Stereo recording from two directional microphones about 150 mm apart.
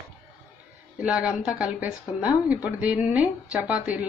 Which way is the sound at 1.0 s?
5° right (ahead or behind).